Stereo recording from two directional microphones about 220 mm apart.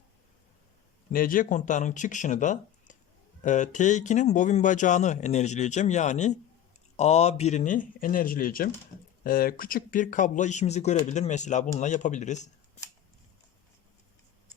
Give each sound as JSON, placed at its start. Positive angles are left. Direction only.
{"t": 1.1, "sound": "speech", "side_deg": 40}